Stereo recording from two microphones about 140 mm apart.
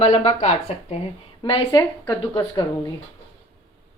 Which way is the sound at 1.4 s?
40° left (ahead or behind).